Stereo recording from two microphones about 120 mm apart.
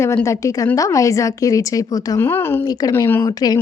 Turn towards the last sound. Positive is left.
turn(degrees=35)  # may be behind; listen again after turning